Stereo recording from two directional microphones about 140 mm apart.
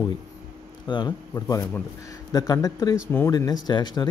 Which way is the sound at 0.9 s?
30° left (ahead or behind).